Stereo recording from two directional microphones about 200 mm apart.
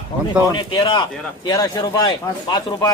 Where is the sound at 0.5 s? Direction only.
25° left (ahead or behind).